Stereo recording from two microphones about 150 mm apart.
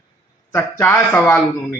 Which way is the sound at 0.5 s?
15° left (ahead or behind).